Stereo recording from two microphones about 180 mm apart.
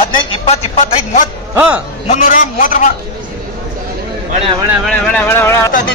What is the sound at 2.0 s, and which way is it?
Speech, 45° left (ahead or behind).